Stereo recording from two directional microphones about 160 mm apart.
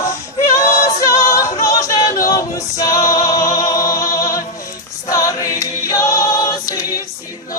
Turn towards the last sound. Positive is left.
turn(degrees=25)  # may be behind; listen again after turning